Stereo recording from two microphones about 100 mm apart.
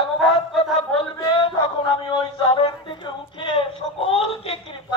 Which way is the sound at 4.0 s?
80° left.